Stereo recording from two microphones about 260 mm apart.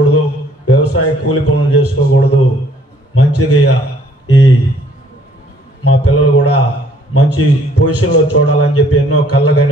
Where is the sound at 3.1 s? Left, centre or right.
Left.